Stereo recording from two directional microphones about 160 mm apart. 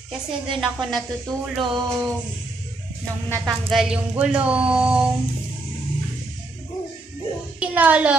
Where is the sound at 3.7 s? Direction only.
5° right (ahead or behind).